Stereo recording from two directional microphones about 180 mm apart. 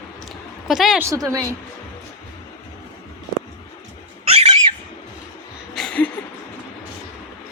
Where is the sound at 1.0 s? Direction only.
20° right (ahead or behind).